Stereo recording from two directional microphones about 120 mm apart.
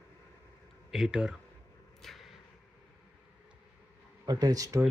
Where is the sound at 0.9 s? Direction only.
5° right (ahead or behind).